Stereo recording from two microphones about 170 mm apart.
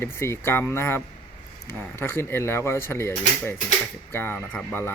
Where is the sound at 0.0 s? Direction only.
15° left (ahead or behind).